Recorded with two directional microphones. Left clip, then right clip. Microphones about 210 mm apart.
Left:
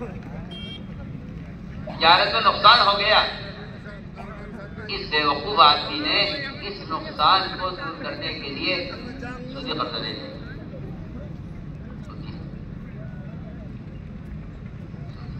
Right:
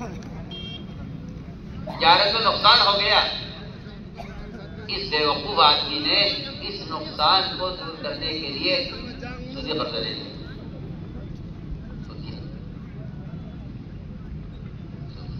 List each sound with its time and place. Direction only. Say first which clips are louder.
2.0 s a man's voice: even; 25° right (ahead or behind)
4.8 s a man's voice: even; 25° right (ahead or behind)